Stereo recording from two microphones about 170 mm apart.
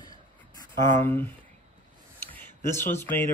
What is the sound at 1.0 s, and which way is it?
Speech, 10° left (ahead or behind).